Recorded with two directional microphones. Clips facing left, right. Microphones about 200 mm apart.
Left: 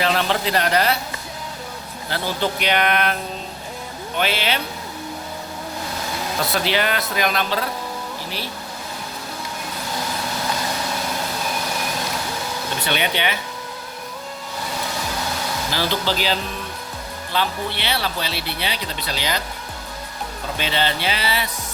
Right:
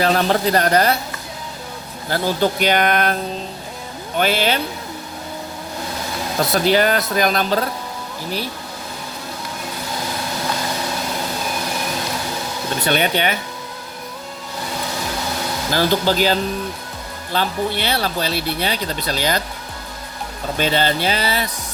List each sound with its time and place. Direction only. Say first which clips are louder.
0.0 s speech: right 4 dB; 40° right (ahead or behind)
2.0 s speech: right 5 dB; 45° right (ahead or behind)
4.2 s speech: right 4 dB; 45° right (ahead or behind)
6.5 s speech: right 7 dB; 40° right (ahead or behind)
12.8 s speech: right 5 dB; 45° right (ahead or behind)
15.7 s speech: right 7 dB; 45° right (ahead or behind)
20.6 s speech: right 5 dB; 45° right (ahead or behind)